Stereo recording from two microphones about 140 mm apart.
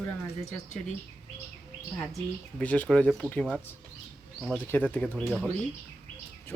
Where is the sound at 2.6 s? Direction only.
10° left (ahead or behind).